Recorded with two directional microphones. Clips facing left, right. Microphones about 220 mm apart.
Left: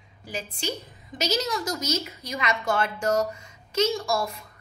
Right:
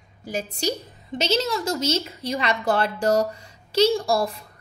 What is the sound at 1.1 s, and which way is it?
A woman's voice, 30° right (ahead or behind).